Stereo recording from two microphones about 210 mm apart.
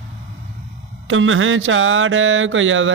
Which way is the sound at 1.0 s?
65° right (ahead or behind).